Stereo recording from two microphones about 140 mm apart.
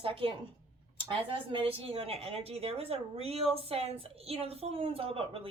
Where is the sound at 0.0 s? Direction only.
40° right (ahead or behind).